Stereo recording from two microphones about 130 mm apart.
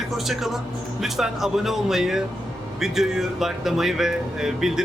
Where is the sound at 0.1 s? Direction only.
Centre (ahead or behind).